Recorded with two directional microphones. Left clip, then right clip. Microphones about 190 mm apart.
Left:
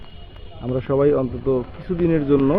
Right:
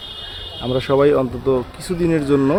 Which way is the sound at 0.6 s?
10° right (ahead or behind).